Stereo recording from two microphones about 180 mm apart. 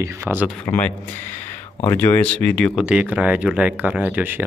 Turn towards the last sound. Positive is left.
turn(degrees=-10)  # may be behind; listen again after turning